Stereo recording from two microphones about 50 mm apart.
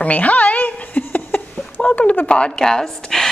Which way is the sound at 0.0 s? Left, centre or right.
Left.